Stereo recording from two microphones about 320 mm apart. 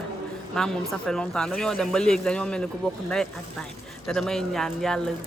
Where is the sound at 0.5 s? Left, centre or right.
Centre.